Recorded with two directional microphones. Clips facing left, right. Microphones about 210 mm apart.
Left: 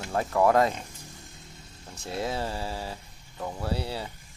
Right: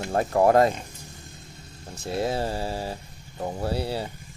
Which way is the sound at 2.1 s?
35° right (ahead or behind).